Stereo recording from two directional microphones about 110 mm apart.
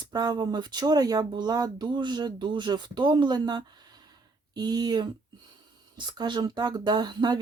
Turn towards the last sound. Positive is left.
turn(degrees=-40)  # may be behind; listen again after turning